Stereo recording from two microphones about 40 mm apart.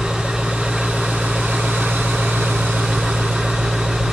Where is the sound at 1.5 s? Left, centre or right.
Right.